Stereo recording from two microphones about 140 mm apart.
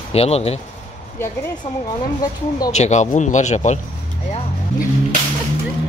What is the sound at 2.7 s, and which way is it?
Speech, 55° left (ahead or behind).